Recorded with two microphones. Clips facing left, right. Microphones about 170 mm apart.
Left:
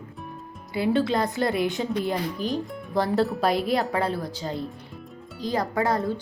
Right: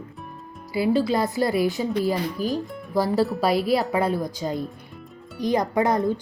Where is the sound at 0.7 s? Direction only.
5° right (ahead or behind).